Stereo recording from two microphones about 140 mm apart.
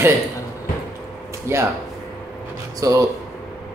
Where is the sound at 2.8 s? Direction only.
20° right (ahead or behind).